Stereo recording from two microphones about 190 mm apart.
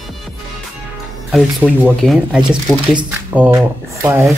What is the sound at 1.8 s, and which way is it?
Speech, centre (ahead or behind).